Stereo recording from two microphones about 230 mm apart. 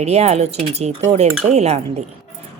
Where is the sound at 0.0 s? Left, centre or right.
Right.